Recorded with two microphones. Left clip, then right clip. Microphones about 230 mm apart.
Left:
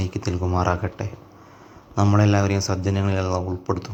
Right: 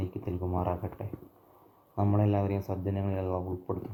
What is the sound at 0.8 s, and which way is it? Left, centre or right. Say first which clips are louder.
Speech: left 10 dB; centre.